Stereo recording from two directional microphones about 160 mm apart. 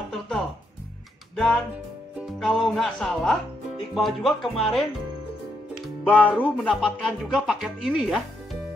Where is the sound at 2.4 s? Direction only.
Centre (ahead or behind).